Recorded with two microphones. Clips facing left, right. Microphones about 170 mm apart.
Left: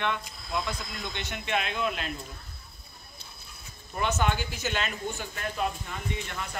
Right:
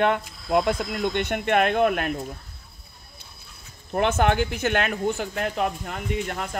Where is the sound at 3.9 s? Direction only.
60° right (ahead or behind).